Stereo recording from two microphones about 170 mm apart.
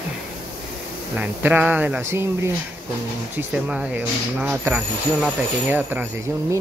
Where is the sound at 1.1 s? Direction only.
10° right (ahead or behind).